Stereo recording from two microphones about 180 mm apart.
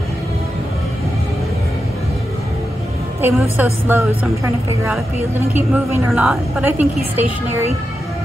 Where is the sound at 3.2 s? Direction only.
10° right (ahead or behind).